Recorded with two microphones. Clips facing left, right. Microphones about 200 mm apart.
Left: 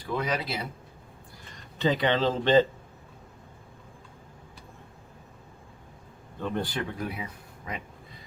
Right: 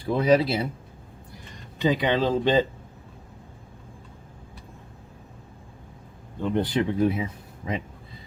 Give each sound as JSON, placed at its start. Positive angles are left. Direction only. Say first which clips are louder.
{"t": 0.0, "sound": "speech", "louder": "right 10 dB", "side_deg": -30}
{"t": 1.8, "sound": "speech", "louder": "right 2 dB", "side_deg": -15}
{"t": 6.4, "sound": "speech", "louder": "right 7 dB", "side_deg": -20}